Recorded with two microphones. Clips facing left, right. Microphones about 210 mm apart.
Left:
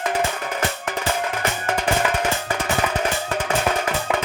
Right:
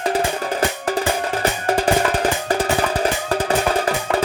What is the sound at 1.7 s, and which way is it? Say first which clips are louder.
Music: right 4 dB; 35° right (ahead or behind).